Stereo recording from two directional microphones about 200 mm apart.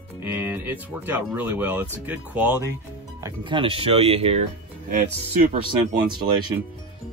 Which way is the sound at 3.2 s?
25° right (ahead or behind).